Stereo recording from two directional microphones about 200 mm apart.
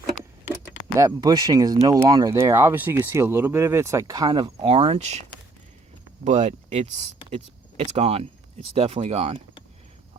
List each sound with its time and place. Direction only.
0.9 s speech: 15° right (ahead or behind); by 5.2 s 35° right (ahead or behind)
6.2 s speech: 35° right (ahead or behind)